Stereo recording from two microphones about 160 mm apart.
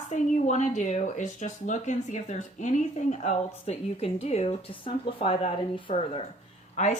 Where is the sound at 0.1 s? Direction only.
50° left (ahead or behind).